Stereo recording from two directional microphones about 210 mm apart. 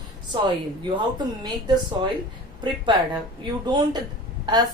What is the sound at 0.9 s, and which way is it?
Speech, 20° right (ahead or behind).